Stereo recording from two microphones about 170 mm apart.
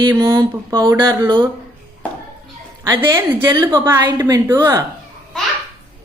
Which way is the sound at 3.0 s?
15° right (ahead or behind).